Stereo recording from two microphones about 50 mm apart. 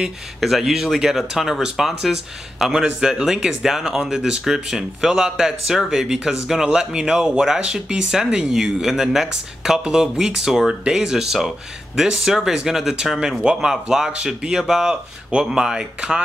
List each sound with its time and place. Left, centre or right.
0.4 s speech: centre